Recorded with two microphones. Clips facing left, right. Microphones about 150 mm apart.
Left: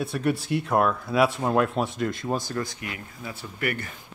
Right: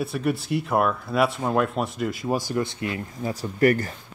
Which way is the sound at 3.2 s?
40° right (ahead or behind).